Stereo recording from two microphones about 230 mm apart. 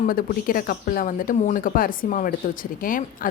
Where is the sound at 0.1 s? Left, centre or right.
Left.